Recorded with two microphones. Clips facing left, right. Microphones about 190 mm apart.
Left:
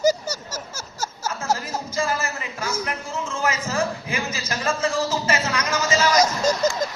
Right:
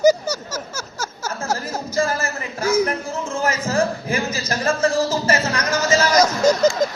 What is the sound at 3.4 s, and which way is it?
A man's voice, 40° right (ahead or behind).